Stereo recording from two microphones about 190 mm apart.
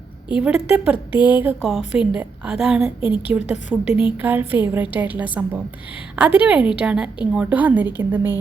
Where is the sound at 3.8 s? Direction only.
25° left (ahead or behind).